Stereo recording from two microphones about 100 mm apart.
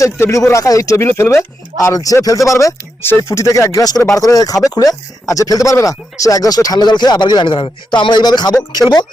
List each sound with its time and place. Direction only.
0.0 s speech: 30° left (ahead or behind)